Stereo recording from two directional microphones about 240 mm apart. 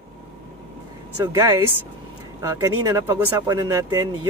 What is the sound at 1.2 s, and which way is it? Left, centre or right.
Speech, centre.